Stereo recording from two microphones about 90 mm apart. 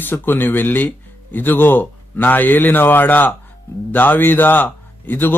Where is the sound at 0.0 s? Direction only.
20° left (ahead or behind).